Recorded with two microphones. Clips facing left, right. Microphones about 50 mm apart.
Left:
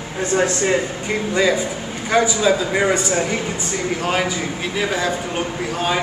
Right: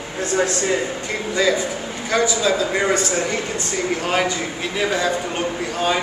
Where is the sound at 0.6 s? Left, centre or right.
Centre.